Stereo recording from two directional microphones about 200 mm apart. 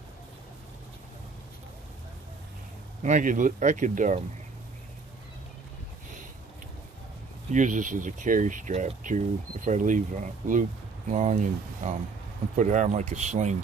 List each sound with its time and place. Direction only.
3.0 s speech: 40° right (ahead or behind)
7.5 s speech: 40° right (ahead or behind)